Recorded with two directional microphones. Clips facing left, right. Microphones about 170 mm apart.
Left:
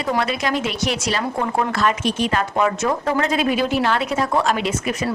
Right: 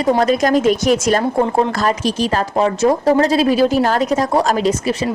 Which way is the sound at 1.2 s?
30° right (ahead or behind).